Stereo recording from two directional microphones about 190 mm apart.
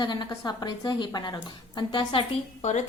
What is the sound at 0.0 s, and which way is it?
A woman's voice, 20° left (ahead or behind).